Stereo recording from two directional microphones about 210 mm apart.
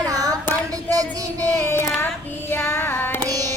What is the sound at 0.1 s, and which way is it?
Child singing, 15° right (ahead or behind).